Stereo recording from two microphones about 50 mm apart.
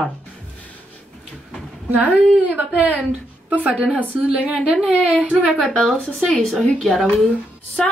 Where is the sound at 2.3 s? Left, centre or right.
Right.